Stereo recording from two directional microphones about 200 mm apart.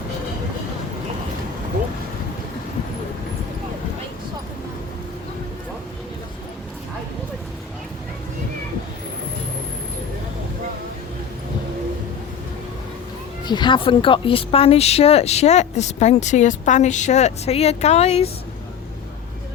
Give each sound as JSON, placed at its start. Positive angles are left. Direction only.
{"t": 13.4, "sound": "speech", "side_deg": 20}